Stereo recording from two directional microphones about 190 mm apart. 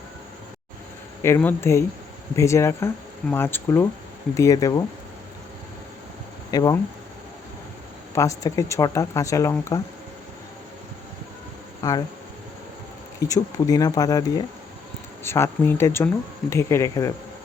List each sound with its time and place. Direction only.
1.2 s speech: 10° left (ahead or behind)
6.5 s speech: 20° left (ahead or behind)
8.1 s speech: 15° left (ahead or behind)
11.8 s speech: 20° left (ahead or behind)
13.1 s speech: 20° left (ahead or behind)